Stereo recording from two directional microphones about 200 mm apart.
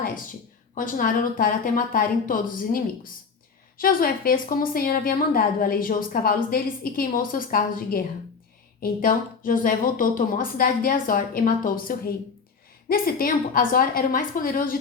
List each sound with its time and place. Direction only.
0.8 s a woman's voice: 45° left (ahead or behind)